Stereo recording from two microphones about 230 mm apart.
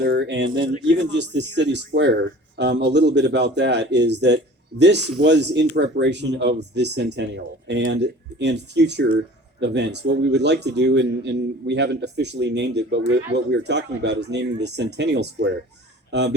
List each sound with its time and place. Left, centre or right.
0.0 s speech: right